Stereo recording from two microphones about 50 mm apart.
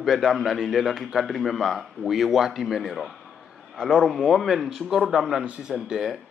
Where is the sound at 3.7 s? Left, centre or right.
Centre.